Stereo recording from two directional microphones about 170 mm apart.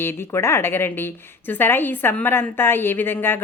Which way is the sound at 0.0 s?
15° left (ahead or behind).